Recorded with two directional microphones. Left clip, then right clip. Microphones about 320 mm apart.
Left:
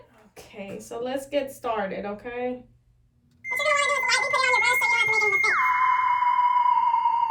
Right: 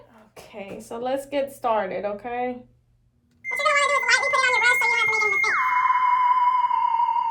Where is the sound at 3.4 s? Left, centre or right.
Centre.